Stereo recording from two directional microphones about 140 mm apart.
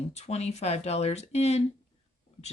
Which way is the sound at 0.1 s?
50° left (ahead or behind).